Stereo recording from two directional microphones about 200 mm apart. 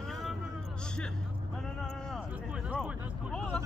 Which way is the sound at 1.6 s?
Centre (ahead or behind).